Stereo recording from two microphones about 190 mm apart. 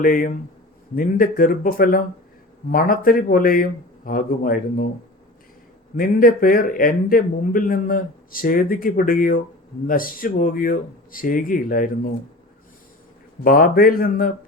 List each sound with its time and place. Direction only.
0.0 s a man's voice: 45° left (ahead or behind)
6.0 s a man's voice: 45° left (ahead or behind)
13.4 s a man's voice: 50° left (ahead or behind)